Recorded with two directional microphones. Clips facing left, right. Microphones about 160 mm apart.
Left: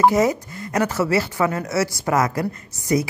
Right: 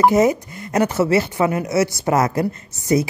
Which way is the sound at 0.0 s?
20° right (ahead or behind).